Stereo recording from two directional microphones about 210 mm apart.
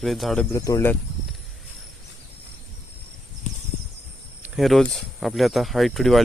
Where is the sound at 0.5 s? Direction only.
15° left (ahead or behind).